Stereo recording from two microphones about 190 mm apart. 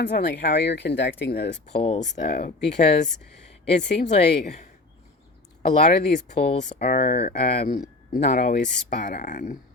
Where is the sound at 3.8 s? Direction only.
40° left (ahead or behind).